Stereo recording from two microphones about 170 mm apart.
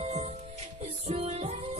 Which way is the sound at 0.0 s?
40° right (ahead or behind).